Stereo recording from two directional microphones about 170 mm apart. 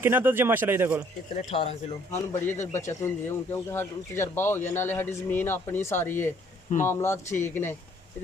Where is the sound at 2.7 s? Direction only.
15° left (ahead or behind).